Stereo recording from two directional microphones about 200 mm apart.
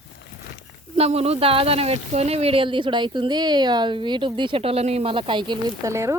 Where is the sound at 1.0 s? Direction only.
30° right (ahead or behind).